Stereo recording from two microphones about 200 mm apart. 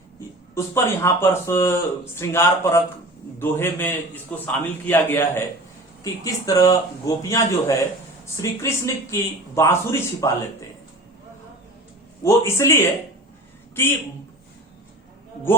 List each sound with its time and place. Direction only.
0.5 s speech: 15° left (ahead or behind)
12.2 s speech: 15° left (ahead or behind)